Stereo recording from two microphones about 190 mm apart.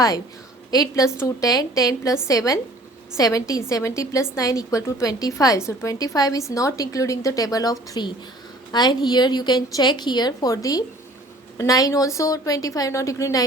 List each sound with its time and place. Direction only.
0.7 s a woman's voice: 20° left (ahead or behind)